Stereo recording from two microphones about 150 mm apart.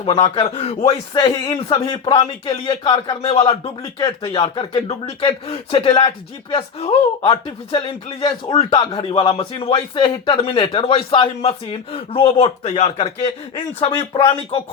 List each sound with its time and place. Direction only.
0.0 s speech: 35° left (ahead or behind)
1.1 s speech: 25° left (ahead or behind)
3.2 s speech: 40° left (ahead or behind)
13.7 s speech: 30° left (ahead or behind)